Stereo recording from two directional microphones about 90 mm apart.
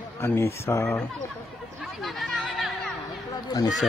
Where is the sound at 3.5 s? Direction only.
45° left (ahead or behind).